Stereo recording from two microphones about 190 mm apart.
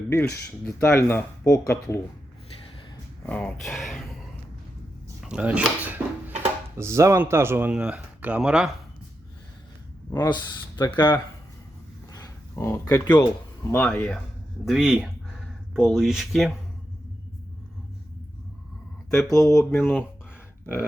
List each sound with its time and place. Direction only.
0.1 s speech: 10° left (ahead or behind)
3.2 s speech: 5° left (ahead or behind)
5.2 s speech: 5° right (ahead or behind)
10.1 s speech: 20° left (ahead or behind)
12.1 s a sound: 20° left (ahead or behind)
13.7 s speech: 5° left (ahead or behind)
19.5 s speech: 15° left (ahead or behind)